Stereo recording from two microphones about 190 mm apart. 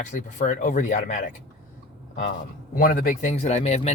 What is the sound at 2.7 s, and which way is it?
Speech, 50° left (ahead or behind).